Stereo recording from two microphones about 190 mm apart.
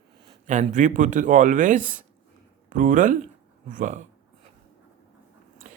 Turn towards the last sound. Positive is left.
turn(degrees=-45)  # may be behind; listen again after turning